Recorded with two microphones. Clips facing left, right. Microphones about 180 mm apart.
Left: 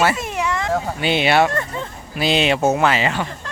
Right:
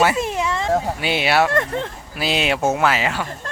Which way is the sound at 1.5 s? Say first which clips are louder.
Right 4 dB; 75° right (ahead or behind).